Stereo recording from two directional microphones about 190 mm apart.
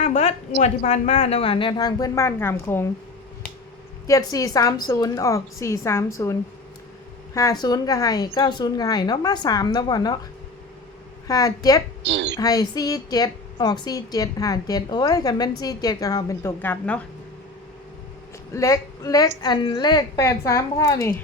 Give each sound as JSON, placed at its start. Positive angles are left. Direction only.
{"t": 0.0, "sound": "a woman's voice", "side_deg": 35}
{"t": 4.0, "sound": "a woman's voice", "side_deg": 15}
{"t": 7.3, "sound": "a woman's voice", "side_deg": 20}
{"t": 11.3, "sound": "a woman's voice", "side_deg": 20}
{"t": 12.0, "sound": "a woman's voice", "side_deg": -65}
{"t": 12.4, "sound": "a woman's voice", "side_deg": 20}
{"t": 18.5, "sound": "a woman's voice", "side_deg": 15}